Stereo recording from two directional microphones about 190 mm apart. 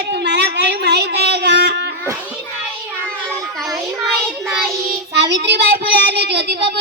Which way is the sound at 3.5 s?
Centre (ahead or behind).